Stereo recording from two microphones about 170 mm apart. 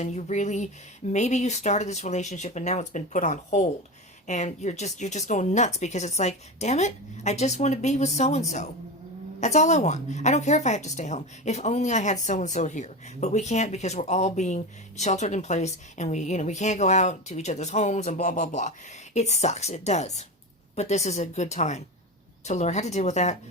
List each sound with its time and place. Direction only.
0.0 s a woman's voice: 40° left (ahead or behind)